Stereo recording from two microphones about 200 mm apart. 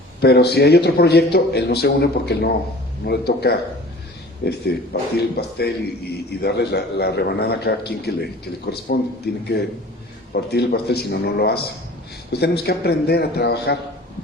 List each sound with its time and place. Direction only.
0.2 s a man's voice: 55° left (ahead or behind)